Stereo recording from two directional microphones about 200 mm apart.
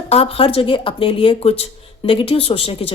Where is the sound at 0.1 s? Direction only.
30° left (ahead or behind).